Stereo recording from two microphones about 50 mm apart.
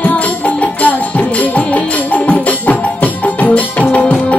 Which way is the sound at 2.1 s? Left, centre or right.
Left.